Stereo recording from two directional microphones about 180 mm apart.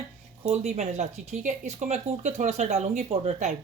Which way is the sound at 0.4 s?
40° right (ahead or behind).